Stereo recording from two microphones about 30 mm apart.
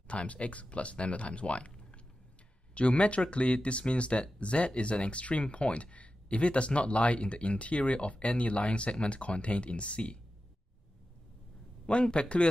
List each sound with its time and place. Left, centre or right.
0.1 s speech: left
11.9 s speech: left